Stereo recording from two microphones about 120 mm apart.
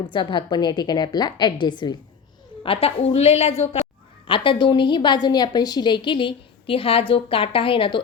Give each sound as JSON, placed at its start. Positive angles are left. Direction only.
{"t": 0.1, "sound": "a woman's voice", "side_deg": 40}
{"t": 2.6, "sound": "a woman's voice", "side_deg": 55}
{"t": 4.3, "sound": "a woman's voice", "side_deg": 45}